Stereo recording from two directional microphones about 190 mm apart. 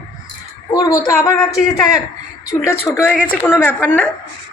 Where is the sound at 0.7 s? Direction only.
20° left (ahead or behind).